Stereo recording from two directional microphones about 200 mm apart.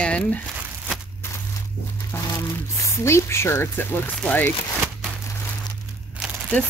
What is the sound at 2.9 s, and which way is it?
Speech, 15° left (ahead or behind).